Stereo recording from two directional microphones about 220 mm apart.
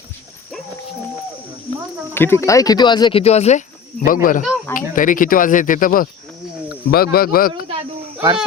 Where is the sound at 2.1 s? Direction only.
10° left (ahead or behind); by 3.6 s 30° left (ahead or behind).